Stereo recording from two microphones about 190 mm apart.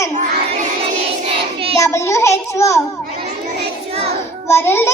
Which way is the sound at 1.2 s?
30° right (ahead or behind).